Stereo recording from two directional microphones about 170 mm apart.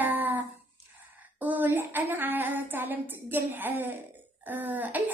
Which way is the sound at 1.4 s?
10° right (ahead or behind).